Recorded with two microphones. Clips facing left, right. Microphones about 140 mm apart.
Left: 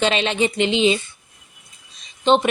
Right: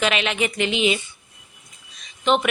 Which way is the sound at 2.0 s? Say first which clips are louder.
Left 4 dB; 30° left (ahead or behind).